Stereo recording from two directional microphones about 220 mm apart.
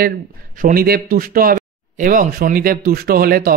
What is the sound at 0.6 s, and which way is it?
Speech, 40° right (ahead or behind).